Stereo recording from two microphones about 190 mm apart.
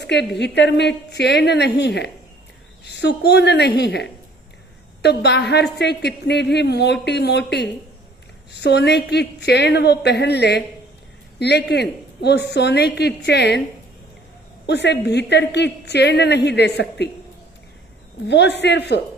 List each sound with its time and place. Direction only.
0.0 s a woman's voice: 65° left (ahead or behind)
14.7 s a woman's voice: 65° left (ahead or behind)
18.3 s a woman's voice: 65° left (ahead or behind)